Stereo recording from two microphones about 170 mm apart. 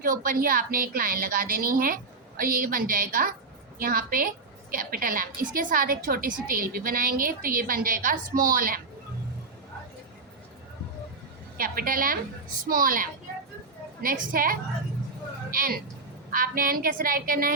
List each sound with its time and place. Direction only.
0.0 s a woman's voice: 55° right (ahead or behind)
11.5 s a woman's voice: 60° right (ahead or behind)